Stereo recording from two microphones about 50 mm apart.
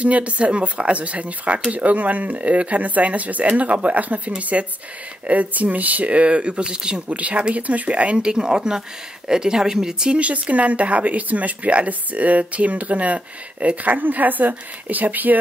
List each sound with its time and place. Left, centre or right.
0.0 s speech: right
10.1 s speech: right